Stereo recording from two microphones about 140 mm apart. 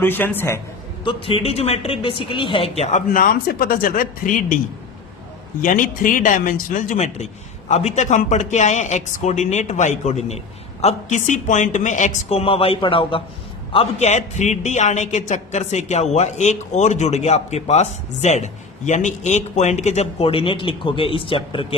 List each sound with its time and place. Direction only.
0.0 s a man's voice: 15° left (ahead or behind)
1.0 s a man's voice: 40° left (ahead or behind)
3.1 s speech: 85° left
5.6 s speech: 75° left (ahead or behind); by 13.2 s 40° left (ahead or behind)
13.7 s a man's voice: 55° left (ahead or behind)